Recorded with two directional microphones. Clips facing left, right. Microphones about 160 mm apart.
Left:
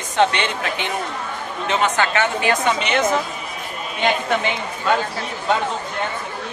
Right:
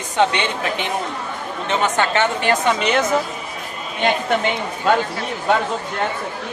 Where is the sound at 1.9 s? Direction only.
35° right (ahead or behind).